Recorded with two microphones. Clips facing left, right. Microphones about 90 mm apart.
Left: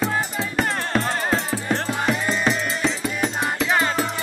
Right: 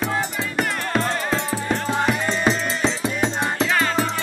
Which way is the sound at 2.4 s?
25° right (ahead or behind).